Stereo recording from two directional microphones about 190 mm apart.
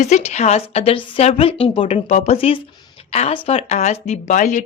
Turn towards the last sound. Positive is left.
turn(degrees=40)  # may be behind; listen again after turning